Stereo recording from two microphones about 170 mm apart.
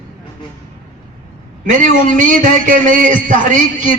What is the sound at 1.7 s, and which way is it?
A man's voice, 50° right (ahead or behind).